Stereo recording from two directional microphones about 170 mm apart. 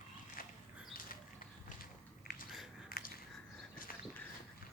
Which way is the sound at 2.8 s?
60° left (ahead or behind).